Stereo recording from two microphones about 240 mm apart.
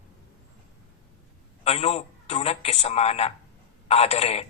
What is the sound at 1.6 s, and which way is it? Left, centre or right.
A man's voice, left.